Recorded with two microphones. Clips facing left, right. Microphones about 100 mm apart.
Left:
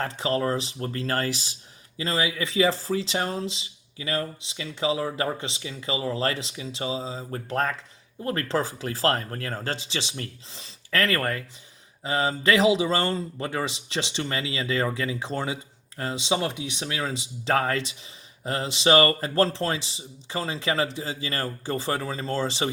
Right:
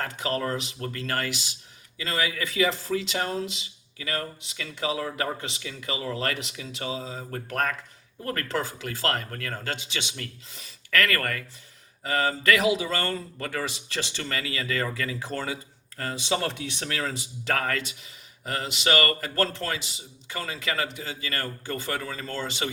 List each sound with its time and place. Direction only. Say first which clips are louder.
0.0 s speech: left 3 dB; 30° left (ahead or behind)